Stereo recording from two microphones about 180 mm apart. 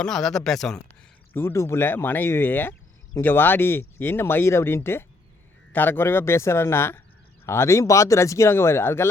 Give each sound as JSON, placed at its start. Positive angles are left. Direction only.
{"t": 0.0, "sound": "speech", "side_deg": 5}